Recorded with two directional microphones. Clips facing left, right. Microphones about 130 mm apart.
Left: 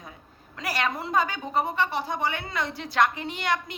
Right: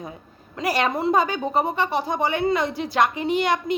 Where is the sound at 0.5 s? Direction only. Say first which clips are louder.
Right 6 dB; 20° right (ahead or behind).